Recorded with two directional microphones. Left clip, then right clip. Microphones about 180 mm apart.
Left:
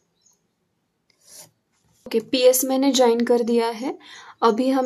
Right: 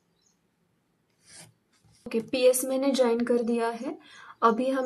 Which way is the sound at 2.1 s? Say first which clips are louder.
Left 6 dB; 45° left (ahead or behind).